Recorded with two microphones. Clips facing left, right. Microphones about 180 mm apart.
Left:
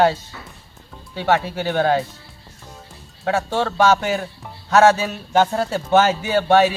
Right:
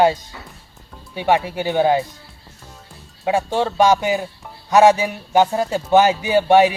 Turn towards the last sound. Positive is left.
turn(degrees=-15)  # may be behind; listen again after turning